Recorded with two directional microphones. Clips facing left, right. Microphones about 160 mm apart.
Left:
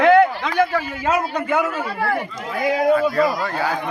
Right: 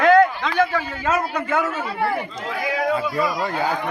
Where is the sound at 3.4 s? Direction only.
20° right (ahead or behind).